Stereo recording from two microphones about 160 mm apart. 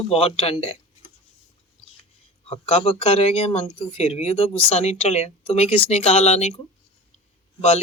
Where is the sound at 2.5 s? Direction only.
35° left (ahead or behind).